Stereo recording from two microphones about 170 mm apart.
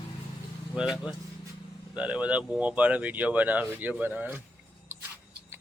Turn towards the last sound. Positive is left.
turn(degrees=-10)  # may be behind; listen again after turning